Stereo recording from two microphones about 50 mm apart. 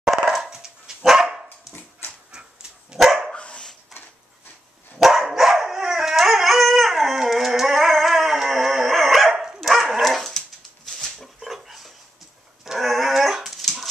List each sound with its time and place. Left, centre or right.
0.0 s dog: centre
2.3 s dog: centre
3.3 s dog: left
4.9 s dog: centre